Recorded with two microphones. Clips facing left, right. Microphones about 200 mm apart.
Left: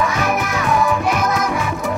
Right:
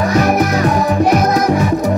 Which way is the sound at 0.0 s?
40° right (ahead or behind).